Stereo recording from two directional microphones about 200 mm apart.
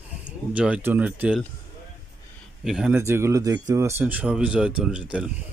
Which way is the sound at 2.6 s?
5° right (ahead or behind).